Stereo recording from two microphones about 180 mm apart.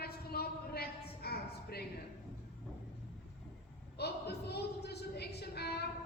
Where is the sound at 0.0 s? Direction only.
60° left (ahead or behind).